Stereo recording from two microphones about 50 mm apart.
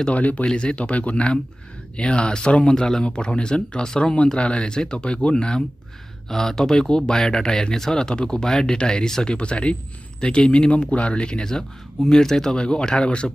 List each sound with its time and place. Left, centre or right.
0.1 s speech: left